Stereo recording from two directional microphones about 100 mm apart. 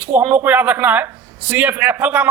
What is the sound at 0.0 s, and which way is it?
A man's voice, 15° right (ahead or behind).